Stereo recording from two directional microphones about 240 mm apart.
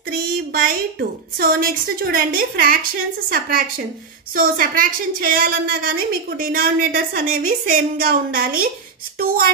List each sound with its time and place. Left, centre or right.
0.1 s a woman's voice: right